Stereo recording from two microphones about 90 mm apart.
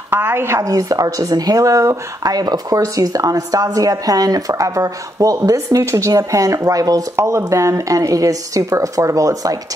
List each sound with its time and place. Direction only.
0.1 s a woman's voice: 25° right (ahead or behind); by 9.6 s 40° right (ahead or behind)